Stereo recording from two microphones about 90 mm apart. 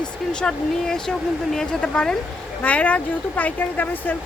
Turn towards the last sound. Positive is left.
turn(degrees=20)  # may be behind; listen again after turning